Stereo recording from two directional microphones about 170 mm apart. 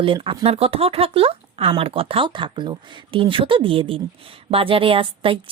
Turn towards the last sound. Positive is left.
turn(degrees=-30)  # may be behind; listen again after turning